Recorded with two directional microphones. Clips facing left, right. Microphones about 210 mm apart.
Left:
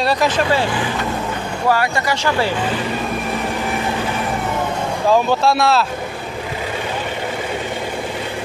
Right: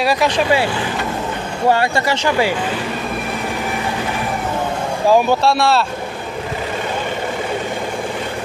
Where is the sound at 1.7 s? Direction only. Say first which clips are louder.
Right 2 dB; 25° right (ahead or behind).